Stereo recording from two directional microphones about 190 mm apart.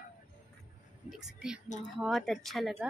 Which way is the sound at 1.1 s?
5° right (ahead or behind).